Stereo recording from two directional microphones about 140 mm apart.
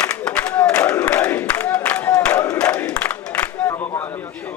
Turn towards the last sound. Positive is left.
turn(degrees=10)  # may be behind; listen again after turning